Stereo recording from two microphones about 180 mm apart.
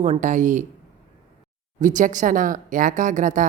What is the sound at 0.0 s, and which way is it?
Speech, 40° right (ahead or behind).